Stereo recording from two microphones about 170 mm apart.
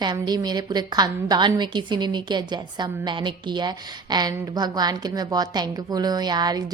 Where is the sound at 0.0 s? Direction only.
25° right (ahead or behind).